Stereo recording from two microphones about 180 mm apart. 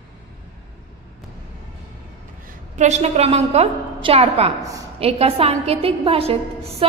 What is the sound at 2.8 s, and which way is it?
A woman's voice, 40° right (ahead or behind).